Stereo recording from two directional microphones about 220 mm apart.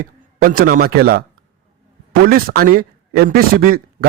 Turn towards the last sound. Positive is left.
turn(degrees=-40)  # may be behind; listen again after turning